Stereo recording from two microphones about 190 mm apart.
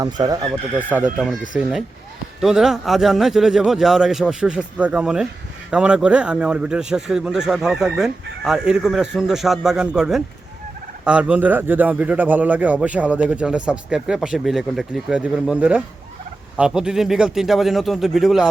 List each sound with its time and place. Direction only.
0.0 s speech: 20° right (ahead or behind)
0.8 s speech: 10° right (ahead or behind)